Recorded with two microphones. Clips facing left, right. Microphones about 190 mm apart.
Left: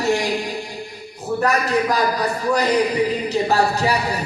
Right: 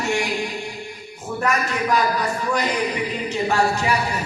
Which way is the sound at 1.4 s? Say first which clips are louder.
Left 3 dB; 35° left (ahead or behind).